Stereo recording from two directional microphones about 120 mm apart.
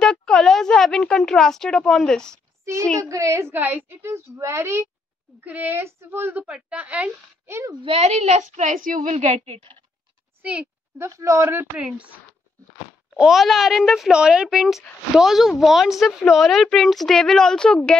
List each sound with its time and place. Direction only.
0.0 s speech: 5° left (ahead or behind)
2.6 s a child's voice: 25° right (ahead or behind)
7.8 s a woman's voice: 60° right (ahead or behind)
10.4 s a woman's voice: 10° right (ahead or behind)
11.0 s a woman's voice: 25° right (ahead or behind)
11.4 s a woman's voice: 15° right (ahead or behind)
13.1 s speech: 5° right (ahead or behind)